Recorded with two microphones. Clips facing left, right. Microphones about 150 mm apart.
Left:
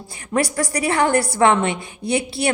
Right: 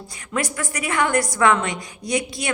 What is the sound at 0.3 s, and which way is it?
A woman's voice, 35° left (ahead or behind).